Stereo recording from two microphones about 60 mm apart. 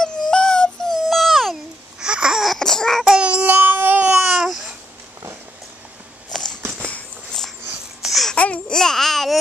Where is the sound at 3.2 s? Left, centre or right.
Centre.